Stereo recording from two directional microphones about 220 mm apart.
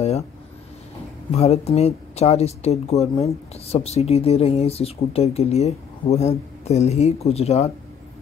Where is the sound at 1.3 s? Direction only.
30° left (ahead or behind).